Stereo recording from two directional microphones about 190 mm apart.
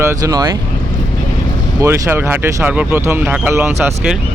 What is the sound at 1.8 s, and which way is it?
Speech, 10° right (ahead or behind).